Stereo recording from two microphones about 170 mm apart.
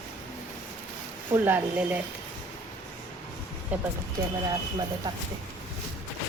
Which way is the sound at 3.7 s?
10° right (ahead or behind).